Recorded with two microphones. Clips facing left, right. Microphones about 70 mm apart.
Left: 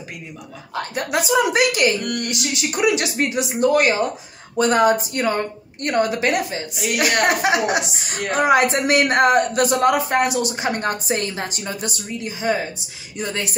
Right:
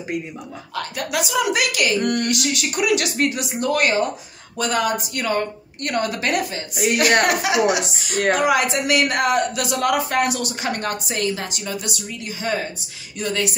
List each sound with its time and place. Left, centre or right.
0.7 s speech: left
2.0 s speech: right
2.3 s speech: left
6.7 s speech: right
7.2 s speech: left
9.8 s speech: left
12.3 s speech: centre
13.2 s speech: left